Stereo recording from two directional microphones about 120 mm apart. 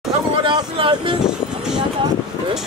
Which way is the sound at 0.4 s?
45° right (ahead or behind).